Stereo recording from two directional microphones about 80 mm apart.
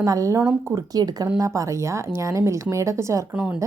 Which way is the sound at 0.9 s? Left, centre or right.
Right.